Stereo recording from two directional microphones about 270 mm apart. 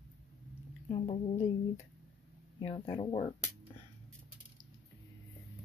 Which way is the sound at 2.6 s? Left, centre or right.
Centre.